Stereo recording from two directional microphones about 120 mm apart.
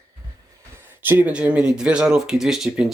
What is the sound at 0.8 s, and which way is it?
Speech, 15° right (ahead or behind).